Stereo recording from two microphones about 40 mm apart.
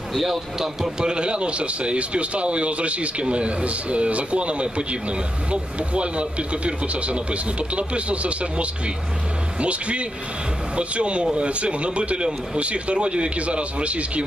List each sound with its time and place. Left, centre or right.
0.1 s a man's voice: centre; by 14.2 s right